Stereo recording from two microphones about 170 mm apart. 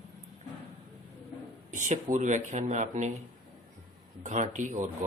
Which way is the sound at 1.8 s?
45° right (ahead or behind).